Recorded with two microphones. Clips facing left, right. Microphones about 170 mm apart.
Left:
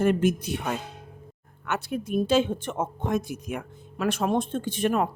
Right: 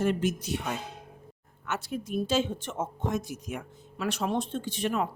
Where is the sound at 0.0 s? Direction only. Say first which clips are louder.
Left 5 dB; 55° left (ahead or behind).